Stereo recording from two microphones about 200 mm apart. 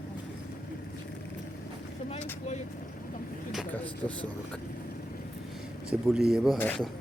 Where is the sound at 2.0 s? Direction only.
30° left (ahead or behind).